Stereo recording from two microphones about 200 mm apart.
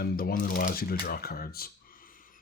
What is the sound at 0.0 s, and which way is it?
Speech, 50° left (ahead or behind).